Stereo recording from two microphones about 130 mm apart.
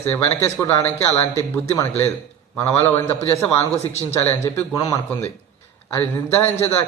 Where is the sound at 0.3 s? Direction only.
20° left (ahead or behind).